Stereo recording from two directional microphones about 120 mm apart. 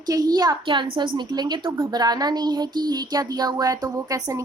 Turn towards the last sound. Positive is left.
turn(degrees=-30)  # may be behind; listen again after turning